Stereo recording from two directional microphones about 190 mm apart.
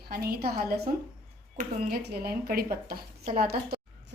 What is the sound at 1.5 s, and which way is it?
A woman's voice, 55° right (ahead or behind).